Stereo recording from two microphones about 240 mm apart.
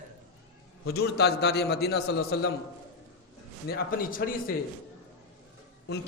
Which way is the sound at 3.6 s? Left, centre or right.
Left.